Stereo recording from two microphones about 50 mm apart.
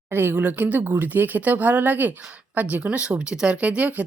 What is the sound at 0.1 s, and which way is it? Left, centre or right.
Speech, right.